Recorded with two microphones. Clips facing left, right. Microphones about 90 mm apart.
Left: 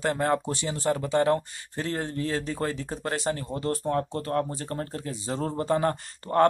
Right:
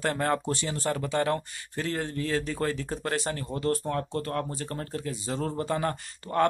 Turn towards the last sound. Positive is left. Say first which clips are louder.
# left 4 dB
turn(degrees=35)  # may be behind; listen again after turning